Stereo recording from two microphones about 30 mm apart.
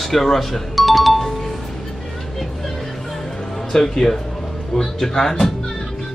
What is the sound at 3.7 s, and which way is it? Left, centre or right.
Speech, centre.